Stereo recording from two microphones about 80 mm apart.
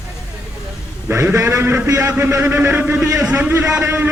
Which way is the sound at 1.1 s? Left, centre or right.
Right.